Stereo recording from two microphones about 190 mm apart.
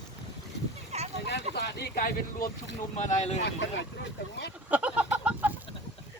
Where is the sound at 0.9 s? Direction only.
35° right (ahead or behind).